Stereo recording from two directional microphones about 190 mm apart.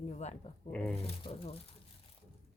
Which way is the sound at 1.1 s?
30° left (ahead or behind).